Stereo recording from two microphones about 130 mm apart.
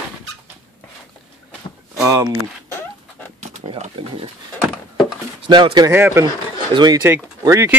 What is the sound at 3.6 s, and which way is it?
Speech, 50° right (ahead or behind).